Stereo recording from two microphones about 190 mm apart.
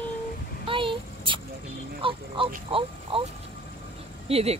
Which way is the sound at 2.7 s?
30° right (ahead or behind).